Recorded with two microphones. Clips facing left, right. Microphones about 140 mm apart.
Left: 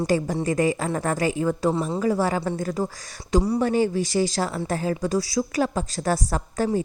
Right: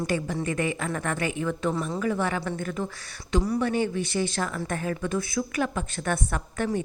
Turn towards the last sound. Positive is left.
turn(degrees=35)  # may be behind; listen again after turning